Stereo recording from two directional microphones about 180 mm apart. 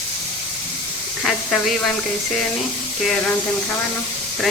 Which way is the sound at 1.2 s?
Centre (ahead or behind).